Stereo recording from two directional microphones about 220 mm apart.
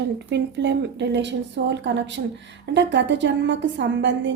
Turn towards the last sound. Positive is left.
turn(degrees=-55)  # may be behind; listen again after turning